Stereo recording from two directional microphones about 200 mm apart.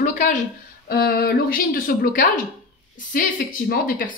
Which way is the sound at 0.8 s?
50° left (ahead or behind).